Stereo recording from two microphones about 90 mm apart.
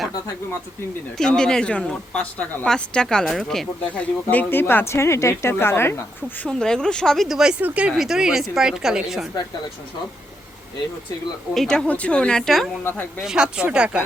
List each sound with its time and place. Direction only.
1.2 s speech: 5° left (ahead or behind)
3.9 s speech: 20° left (ahead or behind)
6.4 s speech: 10° left (ahead or behind)
7.6 s a woman's voice: 15° right (ahead or behind)
11.5 s speech: 5° left (ahead or behind)
12.8 s speech: 20° left (ahead or behind)
13.2 s speech: 10° right (ahead or behind)